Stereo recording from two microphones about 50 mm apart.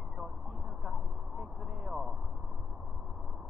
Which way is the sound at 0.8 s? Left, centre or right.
Centre.